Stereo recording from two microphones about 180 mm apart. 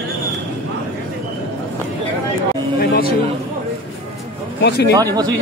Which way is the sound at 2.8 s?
60° left (ahead or behind).